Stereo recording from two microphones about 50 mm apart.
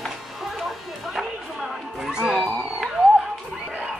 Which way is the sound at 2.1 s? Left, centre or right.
Centre.